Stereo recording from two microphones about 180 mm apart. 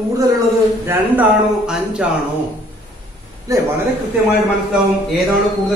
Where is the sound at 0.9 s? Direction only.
5° right (ahead or behind).